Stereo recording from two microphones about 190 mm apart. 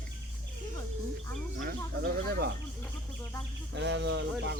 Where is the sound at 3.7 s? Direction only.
70° right (ahead or behind).